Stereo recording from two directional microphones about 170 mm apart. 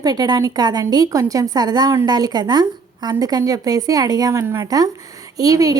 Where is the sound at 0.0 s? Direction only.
25° right (ahead or behind).